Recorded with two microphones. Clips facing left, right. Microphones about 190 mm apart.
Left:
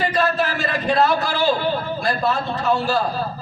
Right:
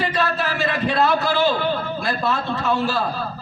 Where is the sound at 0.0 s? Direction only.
45° left (ahead or behind).